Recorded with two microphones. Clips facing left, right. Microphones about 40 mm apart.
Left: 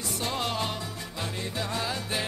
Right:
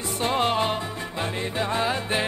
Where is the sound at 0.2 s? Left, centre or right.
Right.